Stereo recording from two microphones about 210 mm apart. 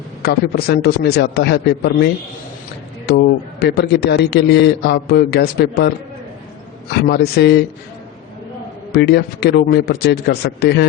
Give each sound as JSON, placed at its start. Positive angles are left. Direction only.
{"t": 0.2, "sound": "a man's voice", "side_deg": 50}
{"t": 3.1, "sound": "a man's voice", "side_deg": 50}
{"t": 7.1, "sound": "a man's voice", "side_deg": 50}
{"t": 8.9, "sound": "a man's voice", "side_deg": 50}